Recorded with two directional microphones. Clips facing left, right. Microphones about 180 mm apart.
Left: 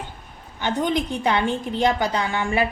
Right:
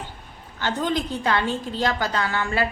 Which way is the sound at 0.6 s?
20° left (ahead or behind).